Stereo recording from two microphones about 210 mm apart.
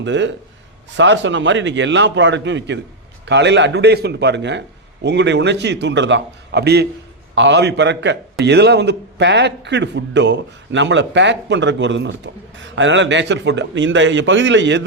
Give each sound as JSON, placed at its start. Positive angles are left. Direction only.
{"t": 0.0, "sound": "a man's voice", "side_deg": -60}